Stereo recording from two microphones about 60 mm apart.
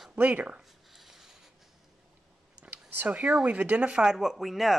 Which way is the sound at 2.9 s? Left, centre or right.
Right.